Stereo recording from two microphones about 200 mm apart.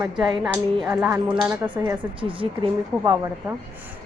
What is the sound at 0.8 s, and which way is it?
Speech, 5° right (ahead or behind).